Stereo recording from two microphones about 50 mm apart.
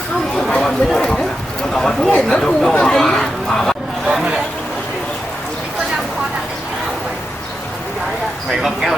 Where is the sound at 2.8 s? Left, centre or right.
Centre.